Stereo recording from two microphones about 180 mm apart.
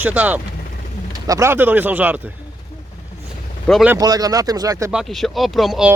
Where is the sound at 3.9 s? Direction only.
20° right (ahead or behind).